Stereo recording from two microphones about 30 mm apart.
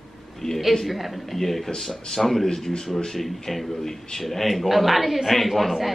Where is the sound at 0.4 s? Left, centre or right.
Left.